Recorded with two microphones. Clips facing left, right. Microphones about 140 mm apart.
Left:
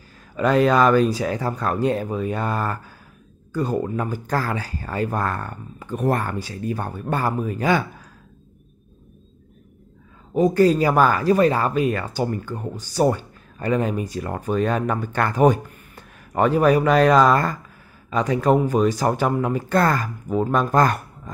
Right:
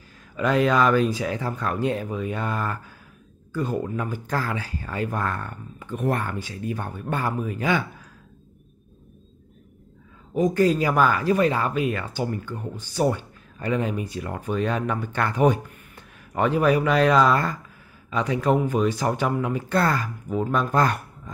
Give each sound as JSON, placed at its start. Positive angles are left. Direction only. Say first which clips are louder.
{"t": 0.4, "sound": "speech", "louder": "left 3 dB", "side_deg": 40}
{"t": 10.3, "sound": "speech", "louder": "left 4 dB", "side_deg": 35}